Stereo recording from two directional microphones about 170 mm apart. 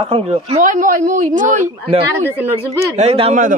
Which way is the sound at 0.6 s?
50° right (ahead or behind).